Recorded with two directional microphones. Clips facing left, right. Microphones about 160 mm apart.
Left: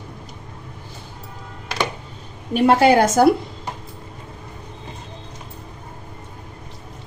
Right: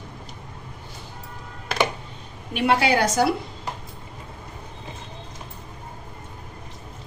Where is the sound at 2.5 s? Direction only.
40° left (ahead or behind).